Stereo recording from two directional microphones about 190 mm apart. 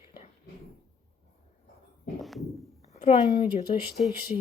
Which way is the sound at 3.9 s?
Centre (ahead or behind).